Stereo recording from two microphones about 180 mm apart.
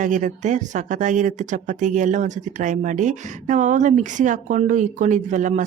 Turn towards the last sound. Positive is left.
turn(degrees=-45)  # may be behind; listen again after turning